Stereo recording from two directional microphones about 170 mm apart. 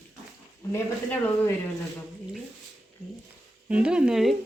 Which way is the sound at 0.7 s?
10° left (ahead or behind).